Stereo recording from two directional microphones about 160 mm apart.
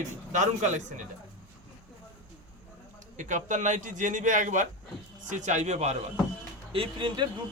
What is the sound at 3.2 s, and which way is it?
A man's voice, 50° right (ahead or behind).